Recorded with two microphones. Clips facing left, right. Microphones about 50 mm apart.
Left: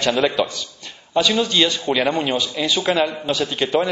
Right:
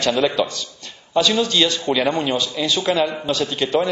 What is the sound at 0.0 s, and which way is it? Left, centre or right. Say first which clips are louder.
A man's voice: even; centre.